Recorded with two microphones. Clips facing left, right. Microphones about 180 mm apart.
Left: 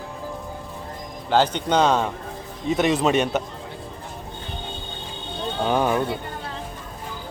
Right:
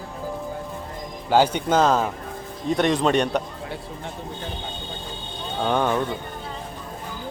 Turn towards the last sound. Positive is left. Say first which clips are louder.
# left 1 dB
turn(degrees=10)  # may be behind; listen again after turning